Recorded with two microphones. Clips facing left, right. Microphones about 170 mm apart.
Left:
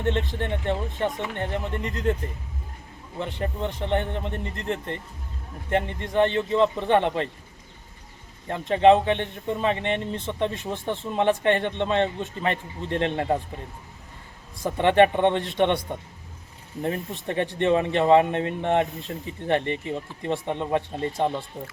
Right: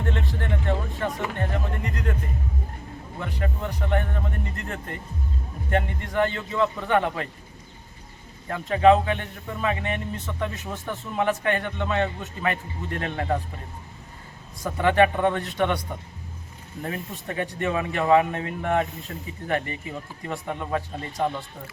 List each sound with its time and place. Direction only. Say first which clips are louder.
0.0 s speech: left 3 dB; 25° left (ahead or behind)
3.2 s speech: left 2 dB; 25° left (ahead or behind)
8.4 s speech: left 1 dB; 25° left (ahead or behind)
14.6 s speech: left 2 dB; 25° left (ahead or behind)
16.8 s speech: left 4 dB; 25° left (ahead or behind)